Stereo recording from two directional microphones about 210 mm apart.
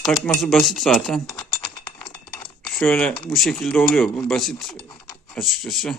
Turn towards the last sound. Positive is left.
turn(degrees=0)  # may be behind; listen again after turning